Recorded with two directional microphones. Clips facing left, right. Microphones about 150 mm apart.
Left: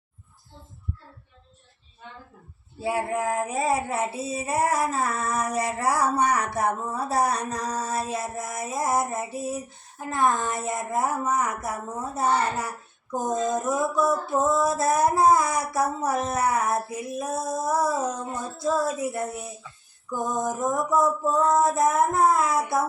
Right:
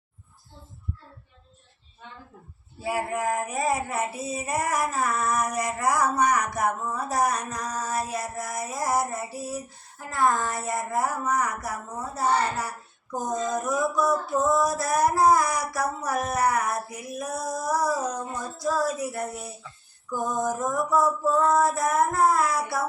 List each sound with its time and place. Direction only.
2.8 s child singing: 25° left (ahead or behind)